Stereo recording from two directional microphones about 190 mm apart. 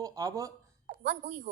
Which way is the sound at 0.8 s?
55° right (ahead or behind).